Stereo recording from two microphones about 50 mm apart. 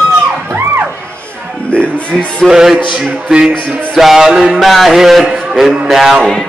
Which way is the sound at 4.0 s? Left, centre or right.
Centre.